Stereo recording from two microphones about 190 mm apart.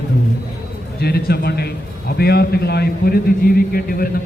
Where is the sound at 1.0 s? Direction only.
55° left (ahead or behind).